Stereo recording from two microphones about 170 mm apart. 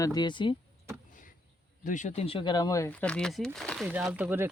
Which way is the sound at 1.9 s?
45° left (ahead or behind).